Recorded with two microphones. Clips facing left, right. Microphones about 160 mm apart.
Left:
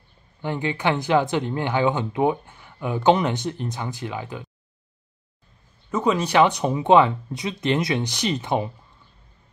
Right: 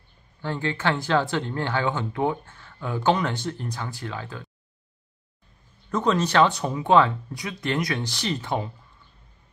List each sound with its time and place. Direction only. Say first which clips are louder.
0.4 s speech: left 2 dB; 15° left (ahead or behind)
5.9 s speech: left 1 dB; 10° left (ahead or behind)